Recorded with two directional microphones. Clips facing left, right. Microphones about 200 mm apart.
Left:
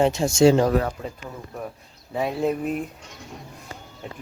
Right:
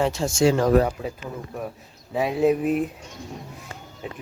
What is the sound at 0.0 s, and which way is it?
Speech, 20° left (ahead or behind).